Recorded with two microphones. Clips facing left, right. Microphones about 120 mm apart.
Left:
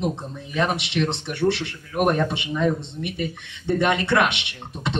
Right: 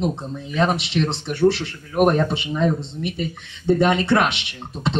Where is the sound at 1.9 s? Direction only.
25° right (ahead or behind).